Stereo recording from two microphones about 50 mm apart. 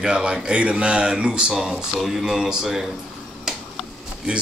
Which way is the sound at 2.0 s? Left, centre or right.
Centre.